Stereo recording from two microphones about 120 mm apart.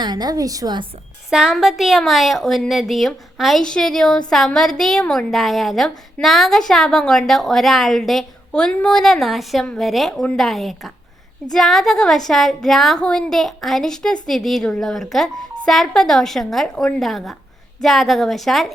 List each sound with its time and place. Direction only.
0.0 s a woman's voice: 35° right (ahead or behind)
1.3 s a woman's voice: 5° right (ahead or behind)